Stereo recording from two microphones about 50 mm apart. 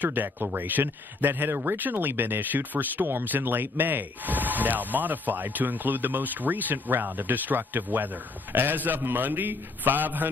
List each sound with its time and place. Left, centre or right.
0.0 s speech: right